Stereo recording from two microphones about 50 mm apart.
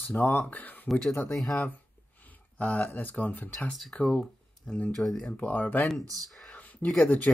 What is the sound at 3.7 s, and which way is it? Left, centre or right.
Speech, centre.